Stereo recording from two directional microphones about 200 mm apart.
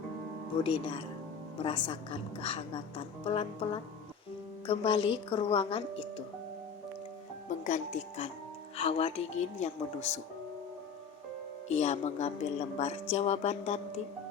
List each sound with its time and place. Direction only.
0.5 s a woman's voice: 25° left (ahead or behind)
7.6 s speech: 40° left (ahead or behind)
11.7 s speech: 35° left (ahead or behind)